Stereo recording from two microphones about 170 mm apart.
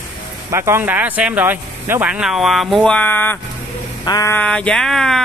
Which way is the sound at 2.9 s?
10° left (ahead or behind).